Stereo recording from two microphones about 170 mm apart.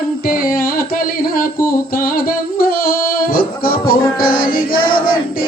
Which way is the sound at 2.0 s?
60° left (ahead or behind).